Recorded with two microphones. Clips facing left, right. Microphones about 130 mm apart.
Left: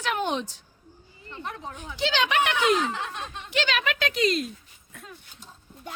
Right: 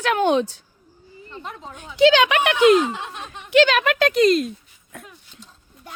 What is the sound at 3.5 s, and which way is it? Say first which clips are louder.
Speech: right 11 dB; 55° right (ahead or behind).